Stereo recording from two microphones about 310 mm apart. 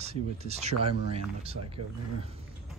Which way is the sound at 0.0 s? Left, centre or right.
Right.